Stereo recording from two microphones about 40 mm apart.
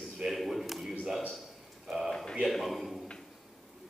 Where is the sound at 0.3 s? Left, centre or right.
Centre.